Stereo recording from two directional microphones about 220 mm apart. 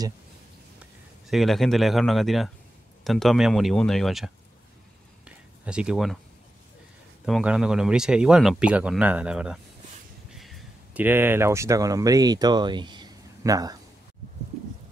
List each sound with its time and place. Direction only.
1.3 s speech: centre (ahead or behind)
5.2 s a sound: 5° right (ahead or behind)
7.2 s speech: centre (ahead or behind)